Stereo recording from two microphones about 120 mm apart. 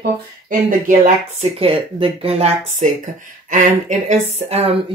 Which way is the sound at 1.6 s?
50° right (ahead or behind).